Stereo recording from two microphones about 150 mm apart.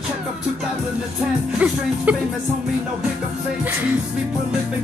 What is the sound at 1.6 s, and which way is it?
Music, 10° right (ahead or behind).